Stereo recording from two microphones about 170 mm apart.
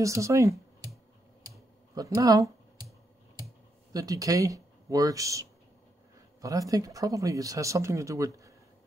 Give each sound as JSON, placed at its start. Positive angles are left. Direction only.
{"t": 0.0, "sound": "speech", "side_deg": -20}
{"t": 1.4, "sound": "a sound", "side_deg": -20}
{"t": 3.9, "sound": "speech", "side_deg": -20}